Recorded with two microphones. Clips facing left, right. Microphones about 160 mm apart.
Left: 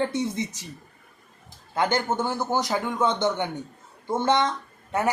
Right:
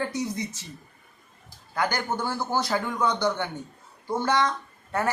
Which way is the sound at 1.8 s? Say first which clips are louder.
Left 3 dB; 25° left (ahead or behind).